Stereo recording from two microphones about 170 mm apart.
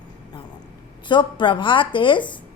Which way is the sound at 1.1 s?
30° left (ahead or behind).